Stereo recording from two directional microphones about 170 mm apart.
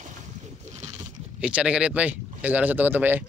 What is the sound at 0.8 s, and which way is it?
Crunch, 45° right (ahead or behind).